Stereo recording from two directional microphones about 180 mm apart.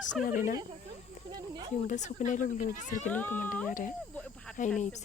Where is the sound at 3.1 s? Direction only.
10° left (ahead or behind).